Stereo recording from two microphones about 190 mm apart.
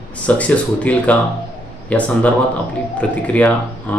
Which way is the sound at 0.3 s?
5° left (ahead or behind).